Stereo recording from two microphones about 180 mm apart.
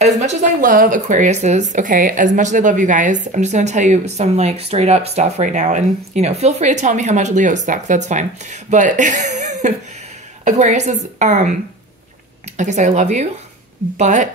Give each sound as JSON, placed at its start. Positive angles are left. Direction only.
{"t": 0.2, "sound": "speech", "side_deg": -50}
{"t": 12.5, "sound": "speech", "side_deg": -40}